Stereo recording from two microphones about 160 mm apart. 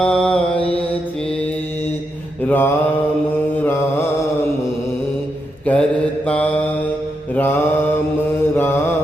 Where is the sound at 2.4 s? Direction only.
10° left (ahead or behind).